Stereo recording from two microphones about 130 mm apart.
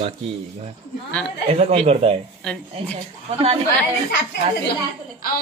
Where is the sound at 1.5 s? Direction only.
55° right (ahead or behind).